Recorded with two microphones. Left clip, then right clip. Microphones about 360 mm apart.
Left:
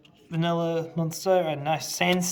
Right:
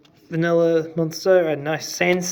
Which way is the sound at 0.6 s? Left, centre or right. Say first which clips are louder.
Right 10 dB; left.